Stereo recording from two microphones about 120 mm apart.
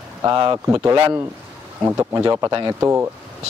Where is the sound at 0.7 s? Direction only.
20° right (ahead or behind).